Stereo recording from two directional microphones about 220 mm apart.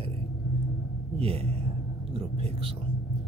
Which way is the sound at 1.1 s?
25° right (ahead or behind).